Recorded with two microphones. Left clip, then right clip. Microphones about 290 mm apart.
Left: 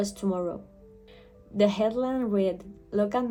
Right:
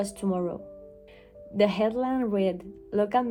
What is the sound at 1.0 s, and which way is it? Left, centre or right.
Music, right.